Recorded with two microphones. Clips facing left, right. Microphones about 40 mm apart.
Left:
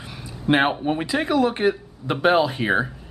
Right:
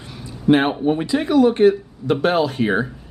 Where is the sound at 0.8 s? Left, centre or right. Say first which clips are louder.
Right 3 dB; centre.